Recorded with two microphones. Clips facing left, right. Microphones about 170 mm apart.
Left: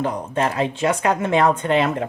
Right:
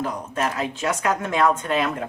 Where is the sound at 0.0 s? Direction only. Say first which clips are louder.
Left 4 dB; 30° left (ahead or behind).